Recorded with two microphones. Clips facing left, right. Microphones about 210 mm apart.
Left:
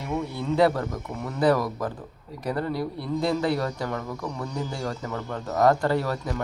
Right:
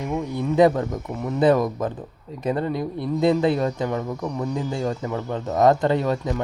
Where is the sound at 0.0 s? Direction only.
20° right (ahead or behind).